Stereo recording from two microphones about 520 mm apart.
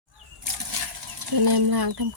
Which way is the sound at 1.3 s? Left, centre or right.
Right.